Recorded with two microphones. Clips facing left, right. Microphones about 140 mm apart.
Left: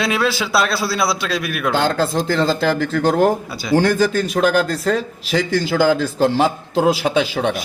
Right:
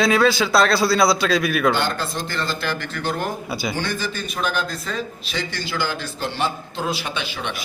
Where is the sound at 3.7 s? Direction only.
90° left.